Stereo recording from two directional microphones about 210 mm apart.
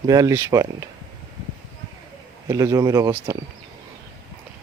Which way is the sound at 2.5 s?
15° right (ahead or behind).